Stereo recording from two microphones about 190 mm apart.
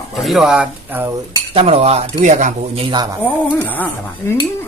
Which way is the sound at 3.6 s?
10° left (ahead or behind).